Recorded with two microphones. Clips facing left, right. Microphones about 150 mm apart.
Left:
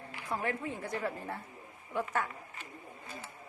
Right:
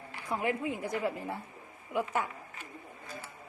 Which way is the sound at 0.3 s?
10° right (ahead or behind).